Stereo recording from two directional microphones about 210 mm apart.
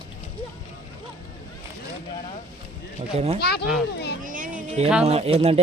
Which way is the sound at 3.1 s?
30° right (ahead or behind).